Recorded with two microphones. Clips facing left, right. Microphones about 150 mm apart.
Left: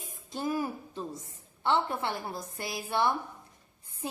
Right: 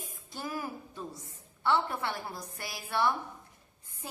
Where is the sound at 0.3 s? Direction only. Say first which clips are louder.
Left 6 dB; 25° left (ahead or behind).